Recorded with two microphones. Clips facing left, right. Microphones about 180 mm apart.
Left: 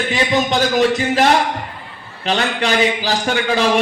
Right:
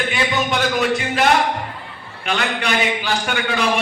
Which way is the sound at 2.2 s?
35° left (ahead or behind).